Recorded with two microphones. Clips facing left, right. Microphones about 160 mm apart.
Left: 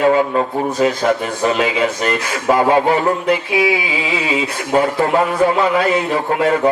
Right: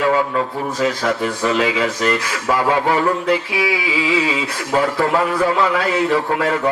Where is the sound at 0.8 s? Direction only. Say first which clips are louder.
Left 3 dB; 20° left (ahead or behind).